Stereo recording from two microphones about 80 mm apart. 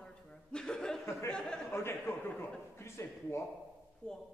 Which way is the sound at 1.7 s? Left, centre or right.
Left.